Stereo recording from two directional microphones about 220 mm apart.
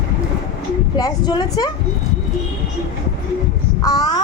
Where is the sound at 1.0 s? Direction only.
20° left (ahead or behind).